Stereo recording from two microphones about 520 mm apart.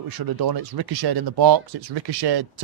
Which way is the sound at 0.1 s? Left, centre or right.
Right.